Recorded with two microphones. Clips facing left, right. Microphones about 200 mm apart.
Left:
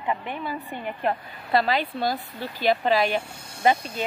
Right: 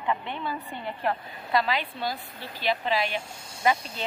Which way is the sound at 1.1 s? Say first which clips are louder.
Left 3 dB; 35° left (ahead or behind).